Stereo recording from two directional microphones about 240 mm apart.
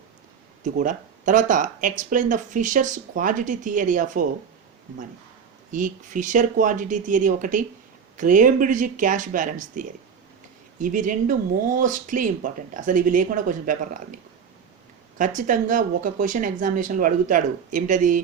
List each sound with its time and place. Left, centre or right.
0.6 s speech: right
5.7 s speech: right
15.2 s speech: right